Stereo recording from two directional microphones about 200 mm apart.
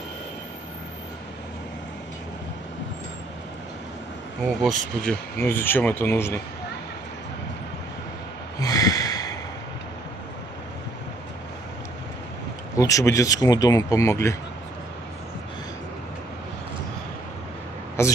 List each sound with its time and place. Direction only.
4.5 s speech: centre (ahead or behind)
5.4 s speech: 10° left (ahead or behind)
8.5 s snort: 20° left (ahead or behind)
12.7 s speech: 15° left (ahead or behind)
18.0 s speech: 10° left (ahead or behind)